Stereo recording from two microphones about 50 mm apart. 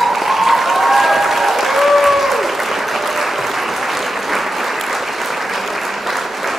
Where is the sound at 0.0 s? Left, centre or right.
Centre.